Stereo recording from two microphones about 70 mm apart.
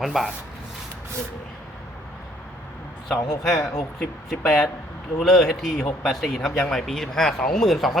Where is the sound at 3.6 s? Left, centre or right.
Centre.